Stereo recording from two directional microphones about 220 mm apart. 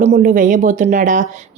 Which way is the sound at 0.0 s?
35° right (ahead or behind).